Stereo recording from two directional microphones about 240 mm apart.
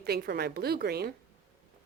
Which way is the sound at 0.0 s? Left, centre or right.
Right.